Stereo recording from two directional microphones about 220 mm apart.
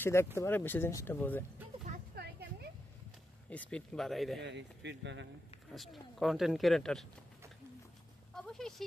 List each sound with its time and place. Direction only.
0.0 s speech: 10° left (ahead or behind)
2.1 s a sound: 45° right (ahead or behind)
3.4 s speech: 5° left (ahead or behind)
4.4 s speech: 55° right (ahead or behind)
5.8 s speech: centre (ahead or behind)
8.4 s speech: centre (ahead or behind)